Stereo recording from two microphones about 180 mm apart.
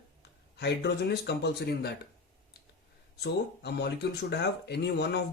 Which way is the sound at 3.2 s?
70° left (ahead or behind).